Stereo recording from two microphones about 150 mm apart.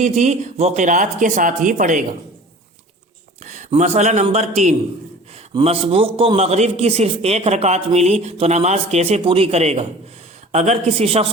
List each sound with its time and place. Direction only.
0.0 s speech: 50° right (ahead or behind)
3.4 s a sound: 55° right (ahead or behind)
3.8 s a man's voice: 50° right (ahead or behind)